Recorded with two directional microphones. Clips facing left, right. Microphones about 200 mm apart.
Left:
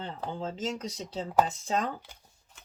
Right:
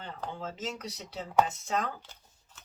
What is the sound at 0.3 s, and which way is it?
Speech, 30° left (ahead or behind).